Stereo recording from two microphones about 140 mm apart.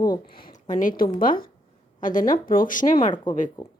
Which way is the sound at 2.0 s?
75° left (ahead or behind).